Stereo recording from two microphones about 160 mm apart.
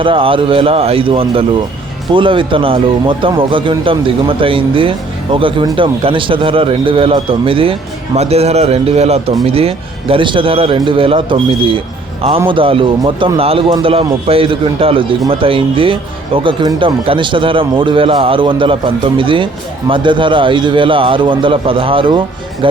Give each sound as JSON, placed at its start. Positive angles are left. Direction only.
{"t": 0.0, "sound": "speech", "side_deg": -35}